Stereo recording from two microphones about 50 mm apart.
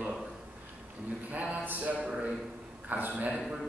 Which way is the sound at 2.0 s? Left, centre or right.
Right.